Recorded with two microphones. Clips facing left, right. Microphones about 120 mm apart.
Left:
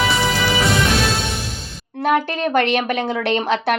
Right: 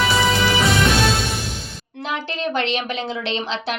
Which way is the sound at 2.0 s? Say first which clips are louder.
Left 7 dB; 55° left (ahead or behind).